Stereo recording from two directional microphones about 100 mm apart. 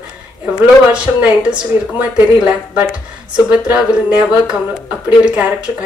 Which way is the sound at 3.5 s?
10° right (ahead or behind).